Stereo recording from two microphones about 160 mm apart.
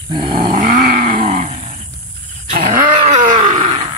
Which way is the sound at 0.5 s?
60° right (ahead or behind).